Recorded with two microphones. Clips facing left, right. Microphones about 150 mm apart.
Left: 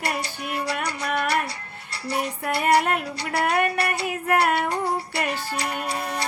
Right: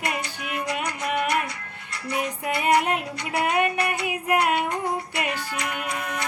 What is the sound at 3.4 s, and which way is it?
Music, 10° right (ahead or behind).